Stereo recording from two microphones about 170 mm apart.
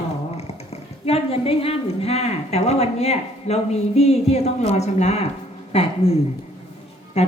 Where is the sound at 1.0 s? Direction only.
35° left (ahead or behind).